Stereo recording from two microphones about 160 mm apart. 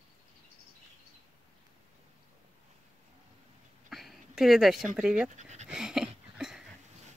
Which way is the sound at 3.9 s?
Centre (ahead or behind).